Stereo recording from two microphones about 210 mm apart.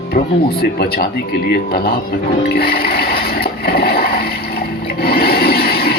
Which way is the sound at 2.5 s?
45° left (ahead or behind).